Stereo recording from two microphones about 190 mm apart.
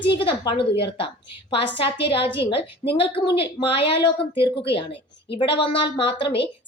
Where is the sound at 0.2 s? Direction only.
25° left (ahead or behind).